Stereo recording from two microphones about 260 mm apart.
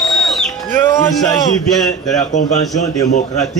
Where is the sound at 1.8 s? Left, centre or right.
Centre.